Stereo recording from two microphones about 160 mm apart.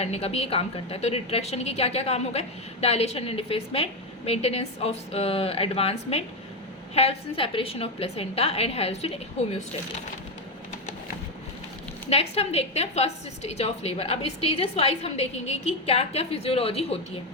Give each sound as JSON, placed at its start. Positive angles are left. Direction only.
{"t": 0.0, "sound": "a woman's voice", "side_deg": 40}
{"t": 12.0, "sound": "a woman's voice", "side_deg": 40}